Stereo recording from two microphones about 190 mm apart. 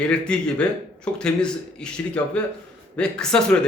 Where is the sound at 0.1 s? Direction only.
5° left (ahead or behind).